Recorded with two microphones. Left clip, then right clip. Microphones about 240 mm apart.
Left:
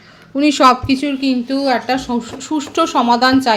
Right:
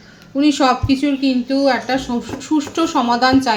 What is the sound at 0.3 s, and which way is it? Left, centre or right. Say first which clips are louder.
Speech: left 4 dB; left.